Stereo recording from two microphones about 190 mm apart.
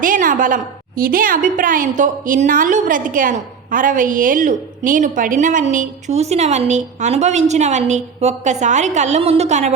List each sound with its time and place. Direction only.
0.0 s a woman's voice: 45° right (ahead or behind)